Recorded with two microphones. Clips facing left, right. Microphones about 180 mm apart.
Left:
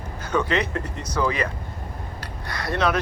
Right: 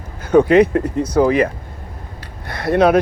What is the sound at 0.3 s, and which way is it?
Speech, 55° right (ahead or behind).